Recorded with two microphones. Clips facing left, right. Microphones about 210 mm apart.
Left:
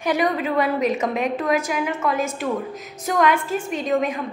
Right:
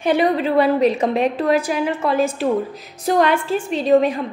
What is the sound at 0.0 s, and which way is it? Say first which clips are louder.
A woman's voice: right 4 dB; 30° right (ahead or behind).